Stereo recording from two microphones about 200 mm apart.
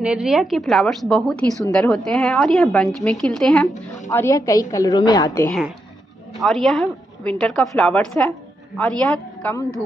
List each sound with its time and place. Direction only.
0.0 s a woman's voice: 5° right (ahead or behind)
4.1 s a woman's voice: 15° left (ahead or behind)
6.3 s a woman's voice: centre (ahead or behind)